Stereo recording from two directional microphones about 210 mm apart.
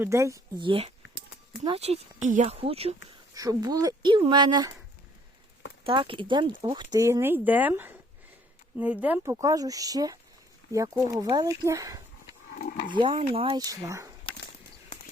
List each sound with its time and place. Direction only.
0.0 s speech: 15° right (ahead or behind)
3.3 s speech: 15° right (ahead or behind)
5.8 s speech: 25° right (ahead or behind)